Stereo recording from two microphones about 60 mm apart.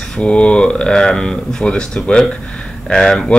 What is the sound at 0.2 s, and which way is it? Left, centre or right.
Speech, centre.